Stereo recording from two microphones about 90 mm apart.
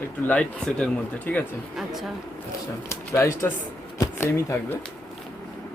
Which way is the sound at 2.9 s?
30° left (ahead or behind).